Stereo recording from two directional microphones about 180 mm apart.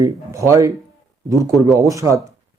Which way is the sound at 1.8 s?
15° right (ahead or behind).